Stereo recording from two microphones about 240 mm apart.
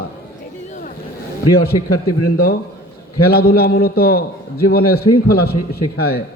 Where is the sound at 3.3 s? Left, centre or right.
Left.